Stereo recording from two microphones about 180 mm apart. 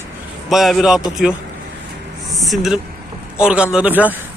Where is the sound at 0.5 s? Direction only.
Centre (ahead or behind).